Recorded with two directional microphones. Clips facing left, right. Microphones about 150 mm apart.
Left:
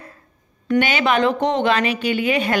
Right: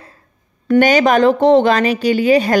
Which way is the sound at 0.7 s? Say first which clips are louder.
Right 7 dB; 45° right (ahead or behind).